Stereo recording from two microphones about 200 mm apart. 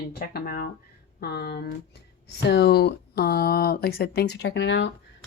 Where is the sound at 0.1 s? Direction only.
50° left (ahead or behind).